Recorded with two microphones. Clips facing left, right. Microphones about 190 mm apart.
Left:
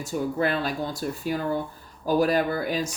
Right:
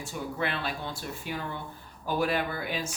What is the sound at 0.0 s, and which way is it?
Speech, 40° left (ahead or behind).